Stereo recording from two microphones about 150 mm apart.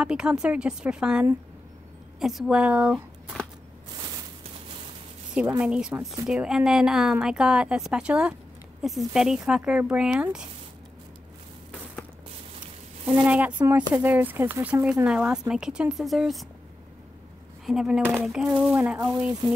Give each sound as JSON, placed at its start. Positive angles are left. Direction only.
{"t": 0.0, "sound": "a woman's voice", "side_deg": -5}
{"t": 5.6, "sound": "a woman's voice", "side_deg": -5}
{"t": 13.3, "sound": "speech", "side_deg": -10}
{"t": 17.6, "sound": "a woman's voice", "side_deg": -5}
{"t": 18.9, "sound": "speech", "side_deg": -25}